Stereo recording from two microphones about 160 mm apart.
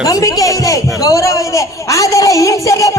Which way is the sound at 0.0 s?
20° left (ahead or behind).